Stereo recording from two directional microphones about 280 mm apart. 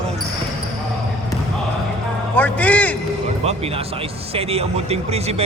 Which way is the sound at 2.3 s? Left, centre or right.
Centre.